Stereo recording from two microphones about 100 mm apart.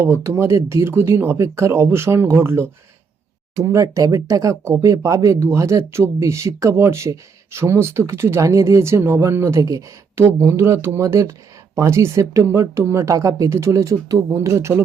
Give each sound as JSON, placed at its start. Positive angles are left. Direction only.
{"t": 0.0, "sound": "speech", "side_deg": -25}